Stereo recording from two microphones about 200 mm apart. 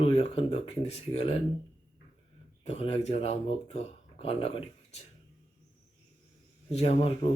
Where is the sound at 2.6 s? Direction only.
30° left (ahead or behind).